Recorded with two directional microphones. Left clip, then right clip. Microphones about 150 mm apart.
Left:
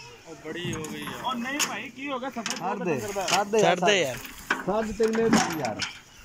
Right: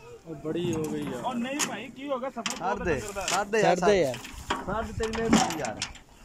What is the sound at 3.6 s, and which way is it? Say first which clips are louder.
Speech: even; 25° right (ahead or behind).